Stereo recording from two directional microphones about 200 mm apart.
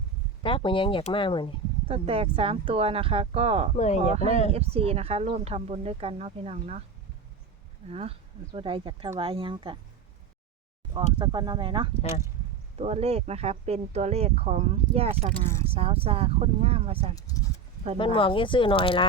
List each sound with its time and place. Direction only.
0.4 s speech: 25° left (ahead or behind)
1.9 s speech: 30° right (ahead or behind)
3.8 s speech: 35° left (ahead or behind)
4.1 s speech: 30° right (ahead or behind)
7.9 s speech: 30° right (ahead or behind)
11.2 s speech: 25° right (ahead or behind)
17.2 s speech: 15° left (ahead or behind)